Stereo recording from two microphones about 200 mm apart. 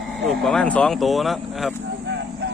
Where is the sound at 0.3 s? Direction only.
Centre (ahead or behind).